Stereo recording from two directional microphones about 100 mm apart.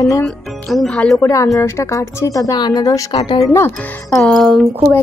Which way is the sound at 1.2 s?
35° left (ahead or behind).